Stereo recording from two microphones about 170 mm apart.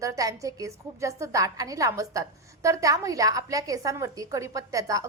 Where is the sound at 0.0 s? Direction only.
20° right (ahead or behind).